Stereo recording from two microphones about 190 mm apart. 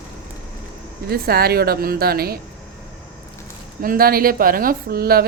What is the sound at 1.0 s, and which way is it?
A woman's voice, 55° right (ahead or behind).